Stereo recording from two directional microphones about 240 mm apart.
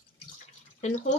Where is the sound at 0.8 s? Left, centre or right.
Left.